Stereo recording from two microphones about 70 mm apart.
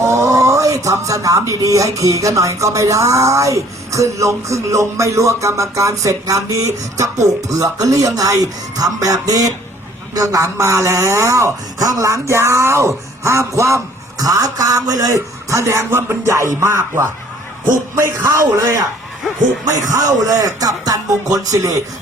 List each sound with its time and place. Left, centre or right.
0.0 s speech: right
6.9 s speech: right